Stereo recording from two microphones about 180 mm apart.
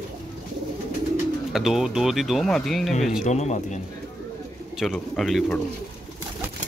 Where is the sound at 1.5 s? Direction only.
Centre (ahead or behind).